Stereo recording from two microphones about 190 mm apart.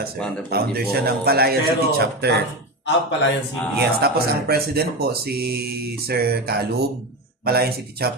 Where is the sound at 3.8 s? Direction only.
55° right (ahead or behind).